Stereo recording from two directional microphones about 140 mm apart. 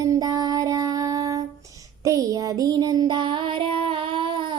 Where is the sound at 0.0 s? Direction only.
25° right (ahead or behind).